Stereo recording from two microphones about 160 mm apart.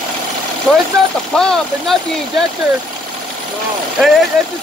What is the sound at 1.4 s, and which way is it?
Speech, 5° left (ahead or behind).